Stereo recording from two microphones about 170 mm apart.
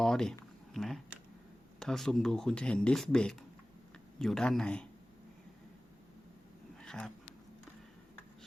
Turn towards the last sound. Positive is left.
turn(degrees=5)  # may be behind; listen again after turning